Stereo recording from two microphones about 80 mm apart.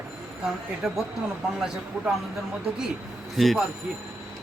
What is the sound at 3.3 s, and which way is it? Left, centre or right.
Speech, centre.